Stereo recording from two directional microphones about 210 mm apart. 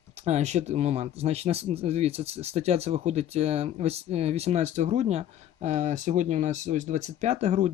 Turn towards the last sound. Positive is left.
turn(degrees=-30)  # may be behind; listen again after turning